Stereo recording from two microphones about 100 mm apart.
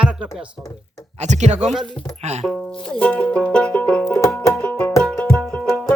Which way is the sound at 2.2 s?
90° right.